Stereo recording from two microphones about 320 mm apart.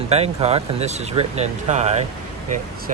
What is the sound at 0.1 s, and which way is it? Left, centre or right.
Speech, centre.